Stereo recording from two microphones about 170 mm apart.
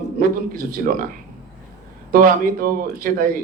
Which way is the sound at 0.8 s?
55° right (ahead or behind).